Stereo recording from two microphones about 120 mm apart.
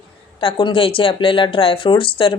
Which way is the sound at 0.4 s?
45° left (ahead or behind).